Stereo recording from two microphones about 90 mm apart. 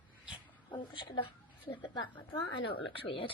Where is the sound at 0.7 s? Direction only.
70° left (ahead or behind).